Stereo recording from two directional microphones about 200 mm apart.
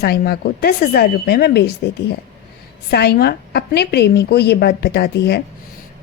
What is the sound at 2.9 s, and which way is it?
A woman's voice, 55° left (ahead or behind).